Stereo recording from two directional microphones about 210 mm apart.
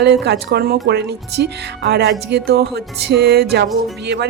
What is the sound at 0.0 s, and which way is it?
Speech, 50° right (ahead or behind).